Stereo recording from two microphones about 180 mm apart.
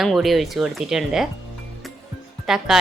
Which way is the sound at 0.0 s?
Centre (ahead or behind).